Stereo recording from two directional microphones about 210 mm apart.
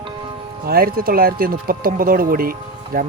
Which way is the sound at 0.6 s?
45° right (ahead or behind).